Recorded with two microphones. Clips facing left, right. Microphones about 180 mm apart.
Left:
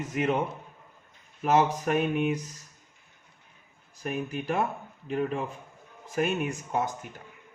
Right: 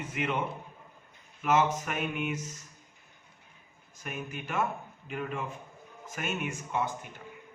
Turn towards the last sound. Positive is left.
turn(degrees=40)  # may be behind; listen again after turning